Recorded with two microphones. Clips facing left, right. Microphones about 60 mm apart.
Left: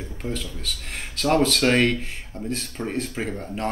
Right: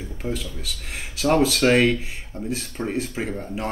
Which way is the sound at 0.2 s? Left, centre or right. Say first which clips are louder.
Right 2 dB; centre.